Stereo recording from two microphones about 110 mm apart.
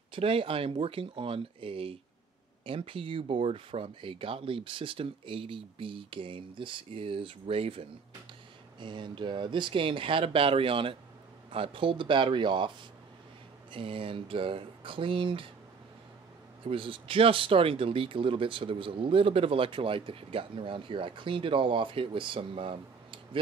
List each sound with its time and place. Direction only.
0.1 s speech: 55° right (ahead or behind)
8.7 s speech: 45° right (ahead or behind)
16.6 s speech: 50° right (ahead or behind)